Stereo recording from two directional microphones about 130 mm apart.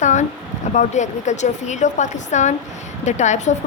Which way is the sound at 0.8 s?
65° left (ahead or behind).